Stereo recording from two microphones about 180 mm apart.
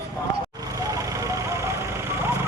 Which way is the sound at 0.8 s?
20° right (ahead or behind).